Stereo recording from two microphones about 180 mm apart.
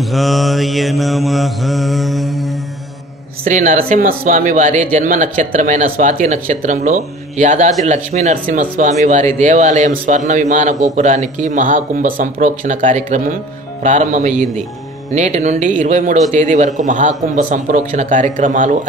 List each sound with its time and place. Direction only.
0.1 s mantra: centre (ahead or behind)
3.4 s a man's voice: 45° right (ahead or behind)